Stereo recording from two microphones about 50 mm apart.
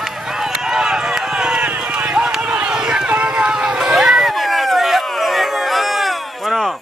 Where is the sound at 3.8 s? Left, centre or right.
Centre.